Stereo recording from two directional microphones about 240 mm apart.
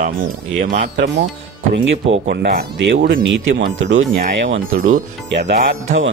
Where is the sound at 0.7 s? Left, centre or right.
Right.